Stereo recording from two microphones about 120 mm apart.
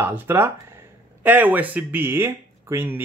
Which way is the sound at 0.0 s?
20° right (ahead or behind).